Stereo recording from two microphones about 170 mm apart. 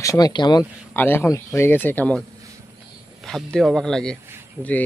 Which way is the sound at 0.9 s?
10° left (ahead or behind).